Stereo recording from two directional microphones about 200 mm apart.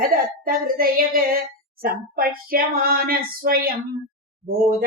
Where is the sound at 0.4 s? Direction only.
45° right (ahead or behind).